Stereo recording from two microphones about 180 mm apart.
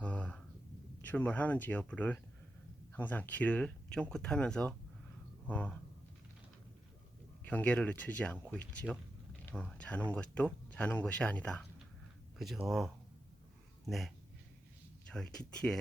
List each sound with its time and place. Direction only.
0.0 s a sound: 5° left (ahead or behind)
1.0 s speech: 10° left (ahead or behind)
7.4 s speech: 5° left (ahead or behind)
15.1 s speech: 5° left (ahead or behind)